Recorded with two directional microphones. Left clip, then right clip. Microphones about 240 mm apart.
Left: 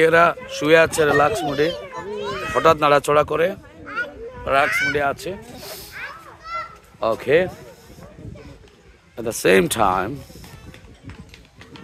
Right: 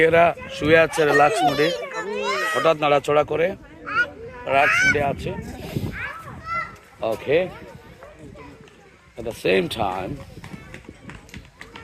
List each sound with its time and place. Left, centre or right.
0.0 s a child's voice: centre
1.7 s children playing: right
2.6 s a child's voice: left
6.5 s children playing: centre
7.0 s speech: left
9.1 s speech: left